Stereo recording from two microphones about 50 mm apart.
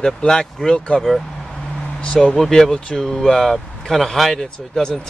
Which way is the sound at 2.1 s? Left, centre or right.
Centre.